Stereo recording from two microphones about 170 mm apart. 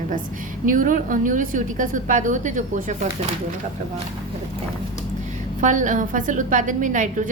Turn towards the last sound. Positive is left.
turn(degrees=-50)  # may be behind; listen again after turning